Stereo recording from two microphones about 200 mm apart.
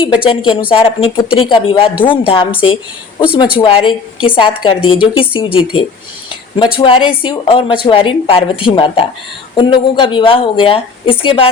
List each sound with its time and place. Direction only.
0.0 s a woman's voice: 25° left (ahead or behind)
6.7 s a woman's voice: 25° left (ahead or behind)